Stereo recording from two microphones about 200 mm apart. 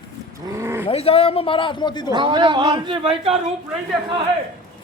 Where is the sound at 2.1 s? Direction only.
25° right (ahead or behind).